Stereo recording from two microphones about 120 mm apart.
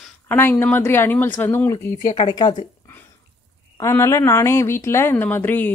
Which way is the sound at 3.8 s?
25° left (ahead or behind).